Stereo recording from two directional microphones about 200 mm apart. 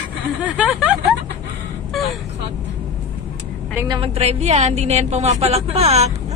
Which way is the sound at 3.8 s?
25° right (ahead or behind).